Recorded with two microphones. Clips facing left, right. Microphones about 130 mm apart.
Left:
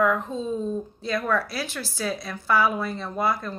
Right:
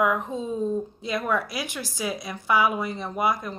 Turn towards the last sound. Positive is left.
turn(degrees=-15)  # may be behind; listen again after turning